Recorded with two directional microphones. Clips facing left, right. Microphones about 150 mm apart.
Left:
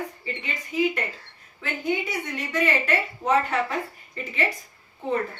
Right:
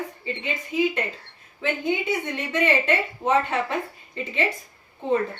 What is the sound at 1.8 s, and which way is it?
A woman's voice, 25° right (ahead or behind).